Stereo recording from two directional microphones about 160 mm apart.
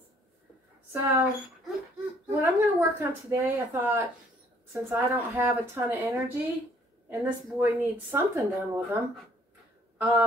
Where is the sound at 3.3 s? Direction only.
15° right (ahead or behind).